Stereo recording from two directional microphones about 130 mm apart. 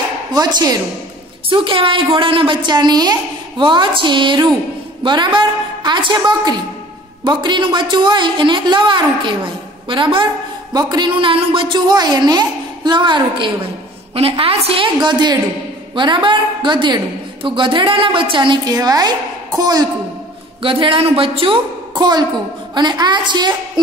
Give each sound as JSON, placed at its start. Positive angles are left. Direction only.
{"t": 1.5, "sound": "a woman's voice", "side_deg": -40}
{"t": 14.1, "sound": "a woman's voice", "side_deg": -50}
{"t": 20.6, "sound": "a woman's voice", "side_deg": -40}
{"t": 21.9, "sound": "a woman's voice", "side_deg": -30}